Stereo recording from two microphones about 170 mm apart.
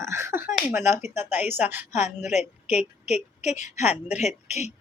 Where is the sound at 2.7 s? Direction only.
40° left (ahead or behind).